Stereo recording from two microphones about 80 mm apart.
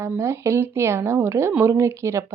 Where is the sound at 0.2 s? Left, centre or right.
Right.